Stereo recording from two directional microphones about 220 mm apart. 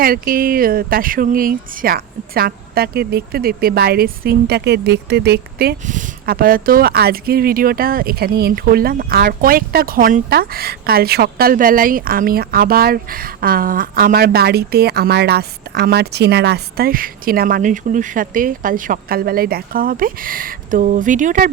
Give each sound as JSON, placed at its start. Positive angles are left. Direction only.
{"t": 0.0, "sound": "speech", "side_deg": -40}